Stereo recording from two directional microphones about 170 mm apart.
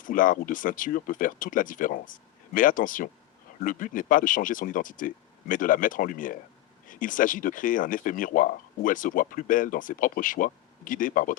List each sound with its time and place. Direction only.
0.0 s speech: 50° left (ahead or behind)